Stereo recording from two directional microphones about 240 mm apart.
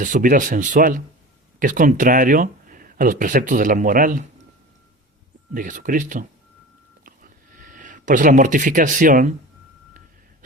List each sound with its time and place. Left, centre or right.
0.0 s speech: right
5.5 s speech: right
7.6 s speech: right